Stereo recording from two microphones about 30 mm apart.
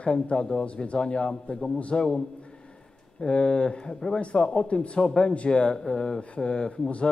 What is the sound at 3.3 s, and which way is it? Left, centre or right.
A man's voice, left.